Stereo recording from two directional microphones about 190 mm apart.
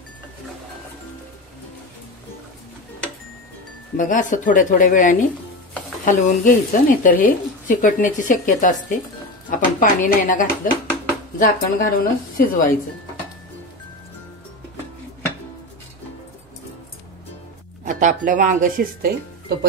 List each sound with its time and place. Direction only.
3.9 s speech: 40° left (ahead or behind)
17.8 s speech: 45° right (ahead or behind)